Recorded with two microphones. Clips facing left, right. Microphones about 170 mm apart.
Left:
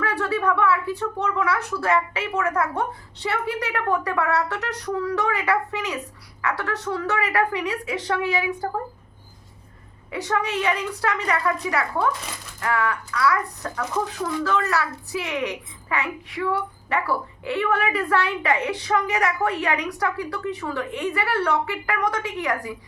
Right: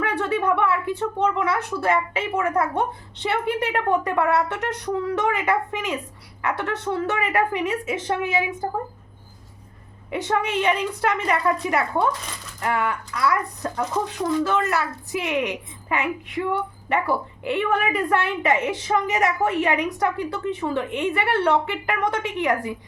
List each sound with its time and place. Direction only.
0.0 s a woman's voice: 25° right (ahead or behind)
10.1 s a woman's voice: 20° right (ahead or behind)